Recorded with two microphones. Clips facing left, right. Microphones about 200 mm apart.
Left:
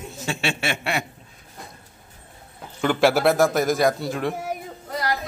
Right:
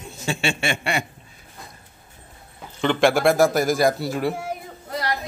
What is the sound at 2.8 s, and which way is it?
A man's voice, 5° left (ahead or behind).